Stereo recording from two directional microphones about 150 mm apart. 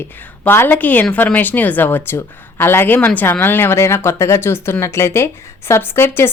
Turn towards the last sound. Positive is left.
turn(degrees=15)  # may be behind; listen again after turning